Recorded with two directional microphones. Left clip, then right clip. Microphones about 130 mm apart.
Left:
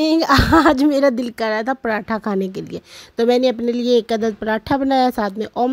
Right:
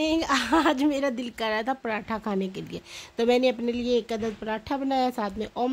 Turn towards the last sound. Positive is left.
turn(degrees=45)  # may be behind; listen again after turning